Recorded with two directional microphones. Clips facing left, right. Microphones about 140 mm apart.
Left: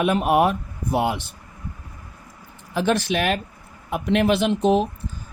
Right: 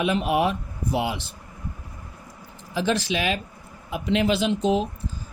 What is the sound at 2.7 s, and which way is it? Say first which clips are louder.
Speech: left 3 dB; 55° left (ahead or behind).